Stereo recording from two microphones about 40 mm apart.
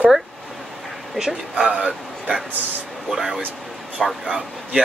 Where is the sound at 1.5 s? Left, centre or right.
Right.